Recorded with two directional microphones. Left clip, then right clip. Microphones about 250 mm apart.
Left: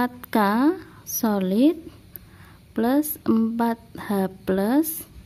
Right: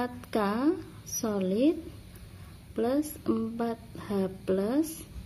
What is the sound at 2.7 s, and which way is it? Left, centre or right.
Speech, left.